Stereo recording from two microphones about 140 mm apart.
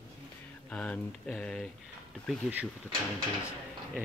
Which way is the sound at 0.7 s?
10° left (ahead or behind).